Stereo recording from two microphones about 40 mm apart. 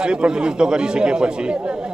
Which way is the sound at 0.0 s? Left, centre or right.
Right.